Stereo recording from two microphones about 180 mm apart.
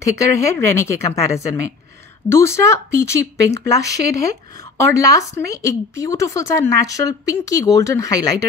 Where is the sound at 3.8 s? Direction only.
20° left (ahead or behind).